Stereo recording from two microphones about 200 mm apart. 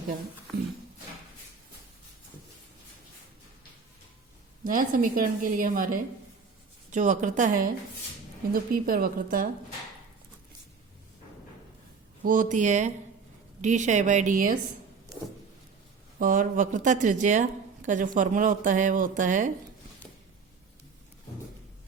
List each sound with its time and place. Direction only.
4.6 s a woman's voice: 40° right (ahead or behind)
12.2 s speech: 45° right (ahead or behind)
16.1 s speech: 45° right (ahead or behind)